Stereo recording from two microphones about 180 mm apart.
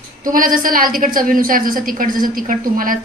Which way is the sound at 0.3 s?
50° right (ahead or behind).